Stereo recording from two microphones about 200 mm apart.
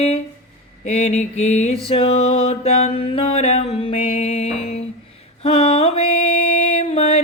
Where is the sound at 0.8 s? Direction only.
35° left (ahead or behind).